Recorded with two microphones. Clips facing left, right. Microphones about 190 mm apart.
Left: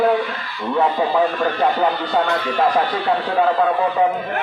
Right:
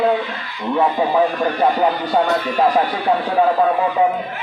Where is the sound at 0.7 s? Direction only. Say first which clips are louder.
Right 1 dB; 15° right (ahead or behind).